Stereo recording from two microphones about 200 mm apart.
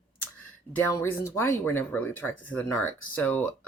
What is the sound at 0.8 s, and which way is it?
Speech, 15° left (ahead or behind).